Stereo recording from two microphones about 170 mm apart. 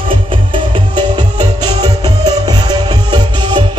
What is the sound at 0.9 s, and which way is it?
Music, 25° right (ahead or behind).